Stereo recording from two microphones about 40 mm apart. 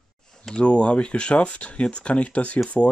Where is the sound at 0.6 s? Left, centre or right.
Left.